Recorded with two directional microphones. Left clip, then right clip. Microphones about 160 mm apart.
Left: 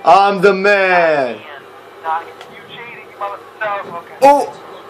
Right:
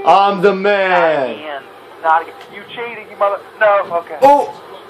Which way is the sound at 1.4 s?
25° right (ahead or behind).